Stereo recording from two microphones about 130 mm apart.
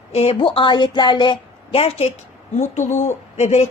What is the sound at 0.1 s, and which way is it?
A woman's voice, 50° left (ahead or behind).